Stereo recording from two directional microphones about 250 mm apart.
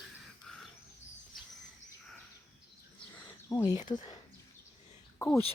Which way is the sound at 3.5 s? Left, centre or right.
Centre.